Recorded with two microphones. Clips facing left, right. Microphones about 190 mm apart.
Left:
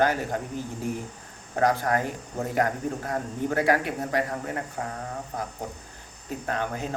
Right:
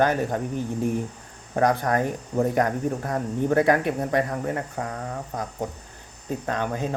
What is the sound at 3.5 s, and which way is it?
Speech, 20° right (ahead or behind).